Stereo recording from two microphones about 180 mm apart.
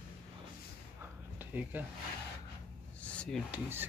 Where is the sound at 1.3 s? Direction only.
10° right (ahead or behind).